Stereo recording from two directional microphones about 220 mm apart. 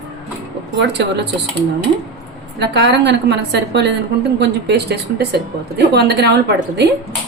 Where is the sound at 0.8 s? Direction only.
50° right (ahead or behind).